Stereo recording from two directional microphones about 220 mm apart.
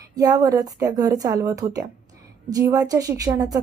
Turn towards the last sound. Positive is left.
turn(degrees=-15)  # may be behind; listen again after turning